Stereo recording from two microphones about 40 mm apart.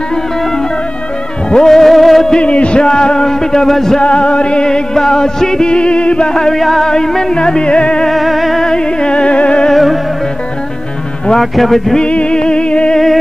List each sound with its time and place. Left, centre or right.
1.5 s music: centre
2.3 s music: left; by 4.0 s centre
4.0 s music: left
5.7 s music: left
8.1 s speech: centre
8.6 s music: left
9.7 s music: centre
11.3 s speech: centre
12.1 s music: left
12.9 s a sound: centre